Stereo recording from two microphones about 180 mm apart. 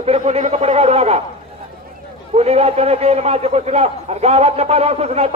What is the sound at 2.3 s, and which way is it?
A man's voice, 35° right (ahead or behind).